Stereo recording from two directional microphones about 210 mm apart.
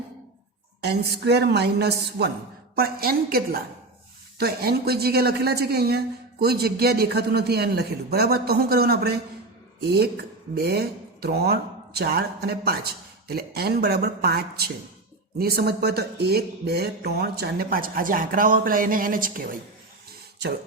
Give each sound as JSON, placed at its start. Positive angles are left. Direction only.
{"t": 0.9, "sound": "speech", "side_deg": -50}